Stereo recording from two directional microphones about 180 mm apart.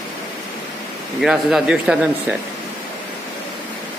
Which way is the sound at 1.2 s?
Centre (ahead or behind).